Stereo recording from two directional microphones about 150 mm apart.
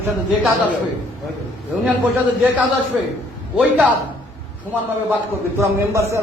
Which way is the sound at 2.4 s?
10° right (ahead or behind).